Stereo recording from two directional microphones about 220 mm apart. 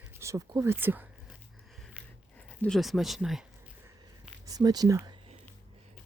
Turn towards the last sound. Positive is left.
turn(degrees=-15)  # may be behind; listen again after turning